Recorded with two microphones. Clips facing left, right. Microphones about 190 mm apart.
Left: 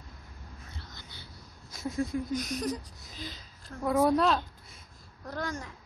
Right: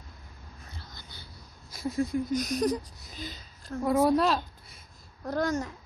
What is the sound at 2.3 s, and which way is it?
Speech, 40° right (ahead or behind).